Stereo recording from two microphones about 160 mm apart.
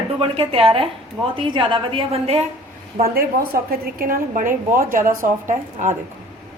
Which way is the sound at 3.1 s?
65° right (ahead or behind).